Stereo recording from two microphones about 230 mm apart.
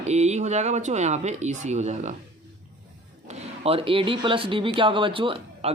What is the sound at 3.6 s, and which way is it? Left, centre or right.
Speech, right.